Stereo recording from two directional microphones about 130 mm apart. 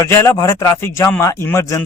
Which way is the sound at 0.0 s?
20° left (ahead or behind).